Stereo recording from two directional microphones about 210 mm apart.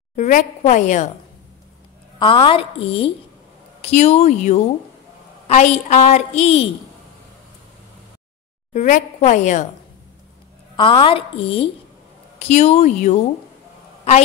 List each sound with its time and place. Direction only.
0.1 s a woman's voice: 35° left (ahead or behind)
2.1 s a woman's voice: 25° left (ahead or behind)
8.7 s a woman's voice: 35° left (ahead or behind)
10.8 s a woman's voice: 25° left (ahead or behind)